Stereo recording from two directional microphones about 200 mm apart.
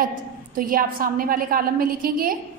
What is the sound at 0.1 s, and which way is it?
A woman's voice, 45° right (ahead or behind).